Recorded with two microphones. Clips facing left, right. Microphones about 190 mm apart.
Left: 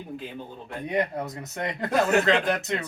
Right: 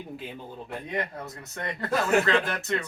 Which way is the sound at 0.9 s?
15° left (ahead or behind).